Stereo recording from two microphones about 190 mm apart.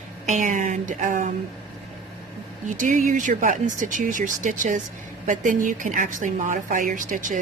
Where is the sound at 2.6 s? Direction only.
40° right (ahead or behind).